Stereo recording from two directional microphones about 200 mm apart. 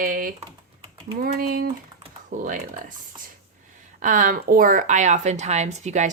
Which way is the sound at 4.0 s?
40° right (ahead or behind).